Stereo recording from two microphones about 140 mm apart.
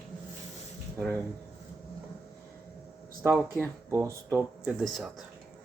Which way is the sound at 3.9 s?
20° right (ahead or behind).